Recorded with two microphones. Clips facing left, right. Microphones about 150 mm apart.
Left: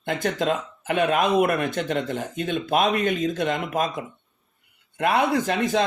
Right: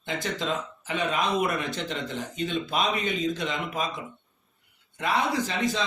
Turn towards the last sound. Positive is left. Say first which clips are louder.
# left 5 dB
turn(degrees=55)  # may be behind; listen again after turning